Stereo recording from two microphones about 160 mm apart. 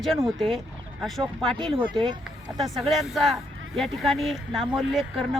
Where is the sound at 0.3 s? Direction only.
Centre (ahead or behind).